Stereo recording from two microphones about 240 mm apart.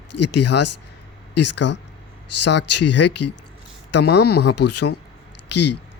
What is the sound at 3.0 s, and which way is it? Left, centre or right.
Speech, left.